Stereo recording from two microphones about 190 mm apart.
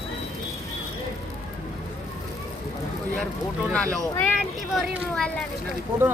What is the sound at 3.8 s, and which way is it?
Speech, 15° right (ahead or behind).